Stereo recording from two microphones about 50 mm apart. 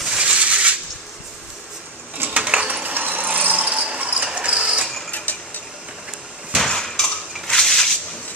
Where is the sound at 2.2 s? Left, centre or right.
Right.